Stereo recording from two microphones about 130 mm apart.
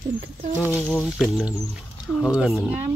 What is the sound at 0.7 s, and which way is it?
Speech, 15° left (ahead or behind).